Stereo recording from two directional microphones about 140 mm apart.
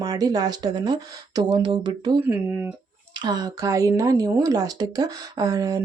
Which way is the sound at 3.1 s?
30° right (ahead or behind).